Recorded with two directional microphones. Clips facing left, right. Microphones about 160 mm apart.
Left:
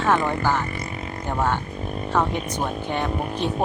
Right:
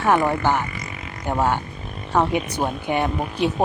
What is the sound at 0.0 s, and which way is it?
Speech, 15° right (ahead or behind).